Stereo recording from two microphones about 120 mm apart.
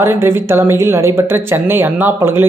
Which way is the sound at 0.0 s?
20° right (ahead or behind).